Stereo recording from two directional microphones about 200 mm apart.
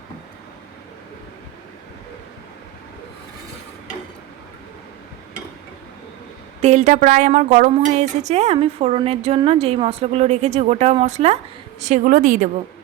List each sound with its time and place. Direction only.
6.6 s a woman's voice: 35° right (ahead or behind)